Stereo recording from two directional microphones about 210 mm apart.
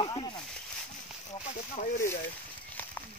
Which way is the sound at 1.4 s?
35° left (ahead or behind).